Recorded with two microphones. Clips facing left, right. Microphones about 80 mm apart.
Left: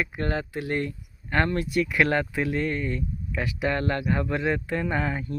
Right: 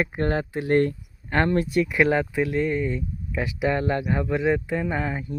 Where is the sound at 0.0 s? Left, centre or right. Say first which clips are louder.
Right 4 dB; right.